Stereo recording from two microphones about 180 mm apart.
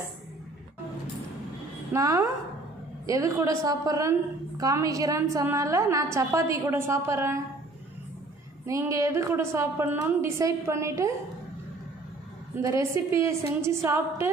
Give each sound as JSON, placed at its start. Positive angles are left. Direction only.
{"t": 1.9, "sound": "a woman's voice", "side_deg": -15}
{"t": 8.6, "sound": "a woman's voice", "side_deg": -15}
{"t": 12.6, "sound": "a woman's voice", "side_deg": -15}